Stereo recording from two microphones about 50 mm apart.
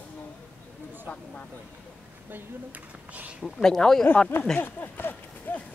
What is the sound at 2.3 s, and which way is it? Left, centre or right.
Speech, right.